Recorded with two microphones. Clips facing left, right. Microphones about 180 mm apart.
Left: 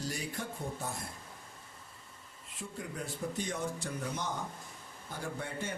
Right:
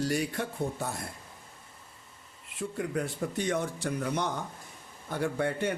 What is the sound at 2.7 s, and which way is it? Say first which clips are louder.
A man's voice: right 8 dB; 70° right (ahead or behind).